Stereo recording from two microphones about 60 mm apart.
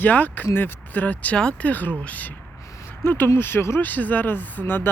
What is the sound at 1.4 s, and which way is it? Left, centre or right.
Speech, centre.